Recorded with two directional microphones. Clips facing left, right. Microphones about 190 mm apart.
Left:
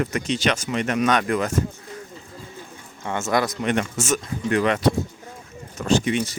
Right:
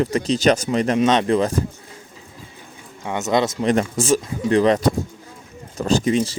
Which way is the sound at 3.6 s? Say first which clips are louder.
Right 4 dB; 35° right (ahead or behind).